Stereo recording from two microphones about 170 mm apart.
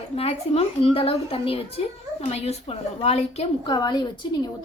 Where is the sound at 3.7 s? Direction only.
25° left (ahead or behind).